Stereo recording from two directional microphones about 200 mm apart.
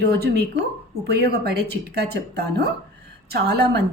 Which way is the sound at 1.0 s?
55° right (ahead or behind).